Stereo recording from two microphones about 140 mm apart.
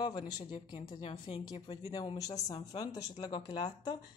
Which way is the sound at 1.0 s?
45° left (ahead or behind).